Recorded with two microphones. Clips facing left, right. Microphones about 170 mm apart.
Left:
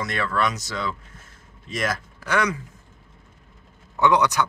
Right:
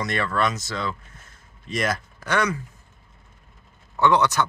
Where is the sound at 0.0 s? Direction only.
Centre (ahead or behind).